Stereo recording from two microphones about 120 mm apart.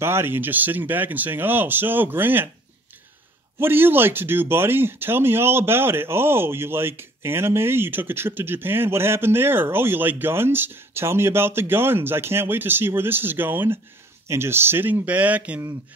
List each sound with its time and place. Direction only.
0.0 s speech: 20° right (ahead or behind)
3.5 s speech: 20° right (ahead or behind)